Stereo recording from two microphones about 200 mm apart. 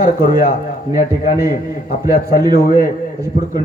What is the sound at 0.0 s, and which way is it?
Speech, 40° left (ahead or behind).